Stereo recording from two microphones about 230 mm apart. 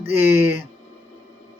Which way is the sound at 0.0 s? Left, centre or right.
Centre.